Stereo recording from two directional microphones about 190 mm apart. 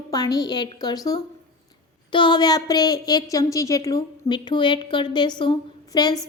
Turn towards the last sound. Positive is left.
turn(degrees=20)  # may be behind; listen again after turning